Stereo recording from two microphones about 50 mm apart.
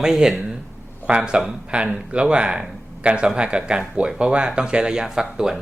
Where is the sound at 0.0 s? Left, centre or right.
Centre.